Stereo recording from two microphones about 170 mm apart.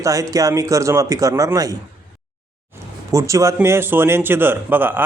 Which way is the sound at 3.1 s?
20° right (ahead or behind).